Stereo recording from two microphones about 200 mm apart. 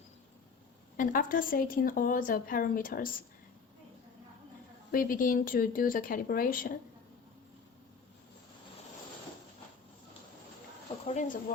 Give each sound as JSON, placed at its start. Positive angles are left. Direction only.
{"t": 0.9, "sound": "a woman's voice", "side_deg": 45}
{"t": 4.9, "sound": "a woman's voice", "side_deg": 45}
{"t": 11.0, "sound": "speech", "side_deg": 35}